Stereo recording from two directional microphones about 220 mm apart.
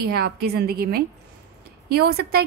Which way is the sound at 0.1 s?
45° right (ahead or behind).